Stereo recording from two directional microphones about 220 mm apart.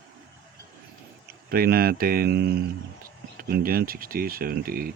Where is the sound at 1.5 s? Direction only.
40° right (ahead or behind).